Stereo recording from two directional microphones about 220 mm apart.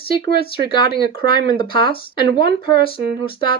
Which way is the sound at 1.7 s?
20° left (ahead or behind).